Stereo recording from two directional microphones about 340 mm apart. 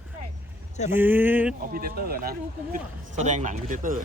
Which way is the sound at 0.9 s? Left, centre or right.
Centre.